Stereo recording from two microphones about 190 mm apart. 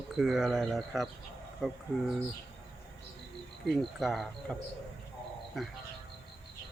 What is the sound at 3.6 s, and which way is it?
Speech, centre (ahead or behind).